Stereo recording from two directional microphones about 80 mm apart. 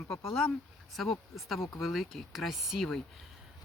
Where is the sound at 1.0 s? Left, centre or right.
Centre.